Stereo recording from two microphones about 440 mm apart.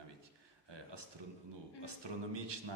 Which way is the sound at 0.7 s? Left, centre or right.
Right.